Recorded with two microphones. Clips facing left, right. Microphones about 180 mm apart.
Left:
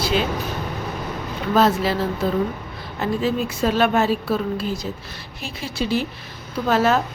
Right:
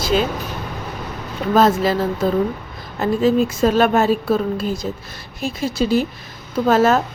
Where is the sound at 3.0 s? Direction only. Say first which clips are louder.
Right 6 dB; 45° right (ahead or behind).